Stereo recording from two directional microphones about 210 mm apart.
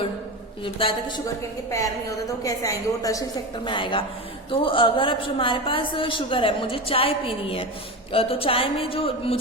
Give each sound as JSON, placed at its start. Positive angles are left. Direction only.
{"t": 0.6, "sound": "a woman's voice", "side_deg": 25}